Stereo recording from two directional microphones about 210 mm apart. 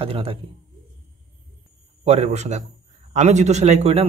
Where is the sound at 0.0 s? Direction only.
25° right (ahead or behind).